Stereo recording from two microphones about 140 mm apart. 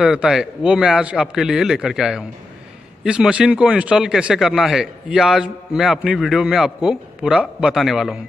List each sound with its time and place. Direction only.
0.0 s speech: 5° right (ahead or behind)